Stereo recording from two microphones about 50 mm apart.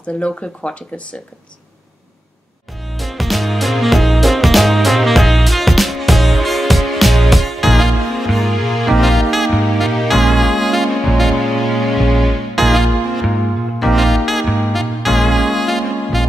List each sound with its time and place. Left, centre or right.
0.0 s speech: left
3.0 s music: centre
13.7 s saxophone: centre